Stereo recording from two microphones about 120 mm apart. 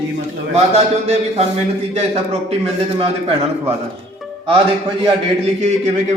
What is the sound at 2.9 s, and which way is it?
Speech, 55° right (ahead or behind).